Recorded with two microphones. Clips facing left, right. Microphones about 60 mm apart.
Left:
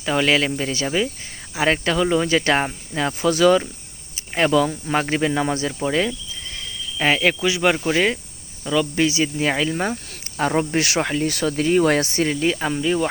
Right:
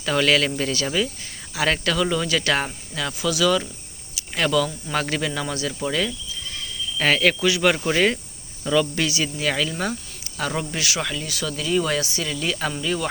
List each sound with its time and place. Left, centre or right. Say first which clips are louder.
0.0 s speech: left 1 dB; centre
3.2 s speech: left 5 dB; left
4.1 s speech: left 3 dB; left
7.0 s speech: left 1 dB; centre
9.0 s speech: left 5 dB; left
10.8 s speech: left 6 dB; left
12.5 s speech: left 4 dB; centre